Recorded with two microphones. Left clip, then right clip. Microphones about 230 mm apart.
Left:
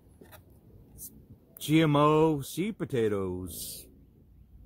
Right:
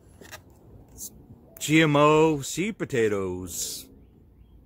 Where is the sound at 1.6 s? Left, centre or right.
Centre.